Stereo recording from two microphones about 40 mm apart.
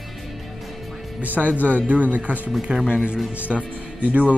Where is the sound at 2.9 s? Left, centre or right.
Right.